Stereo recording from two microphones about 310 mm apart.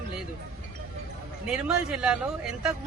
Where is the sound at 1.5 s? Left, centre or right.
Centre.